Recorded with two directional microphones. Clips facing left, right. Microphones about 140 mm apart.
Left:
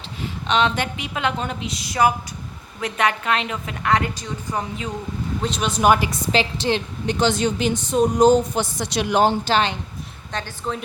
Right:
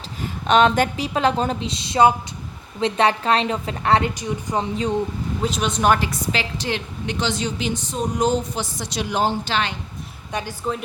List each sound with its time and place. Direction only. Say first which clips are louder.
0.2 s a woman's voice: right 4 dB; 45° right (ahead or behind); by 4.1 s 30° right (ahead or behind)
4.1 s speech: right 3 dB; 15° right (ahead or behind)
5.4 s speech: even; centre (ahead or behind)
6.1 s a woman's voice: left 4 dB; 25° left (ahead or behind)
7.2 s a woman's voice: left 5 dB; 55° left (ahead or behind)
8.2 s speech: left 6 dB; 35° left (ahead or behind)
8.5 s speech: left 4 dB; 65° left (ahead or behind)
9.4 s speech: left 4 dB; 40° left (ahead or behind)
10.3 s speech: right 2 dB; 5° right (ahead or behind)